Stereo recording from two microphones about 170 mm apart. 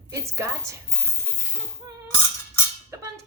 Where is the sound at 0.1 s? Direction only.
15° right (ahead or behind).